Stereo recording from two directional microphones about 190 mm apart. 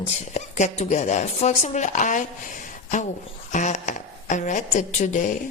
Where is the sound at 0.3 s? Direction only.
40° left (ahead or behind).